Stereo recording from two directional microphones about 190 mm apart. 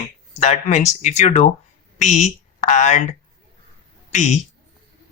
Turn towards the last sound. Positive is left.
turn(degrees=40)  # may be behind; listen again after turning